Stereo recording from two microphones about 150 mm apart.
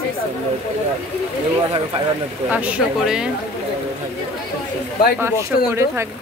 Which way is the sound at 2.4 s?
10° right (ahead or behind).